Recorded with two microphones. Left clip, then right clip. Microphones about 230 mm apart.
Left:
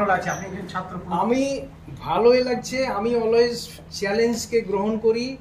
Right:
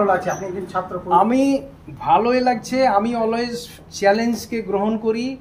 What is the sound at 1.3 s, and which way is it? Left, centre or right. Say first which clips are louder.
Speech: right 4 dB; centre.